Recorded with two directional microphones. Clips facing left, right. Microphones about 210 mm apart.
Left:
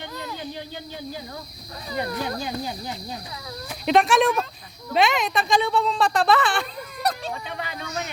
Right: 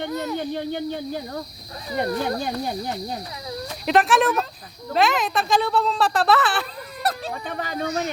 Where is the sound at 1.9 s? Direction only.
45° right (ahead or behind).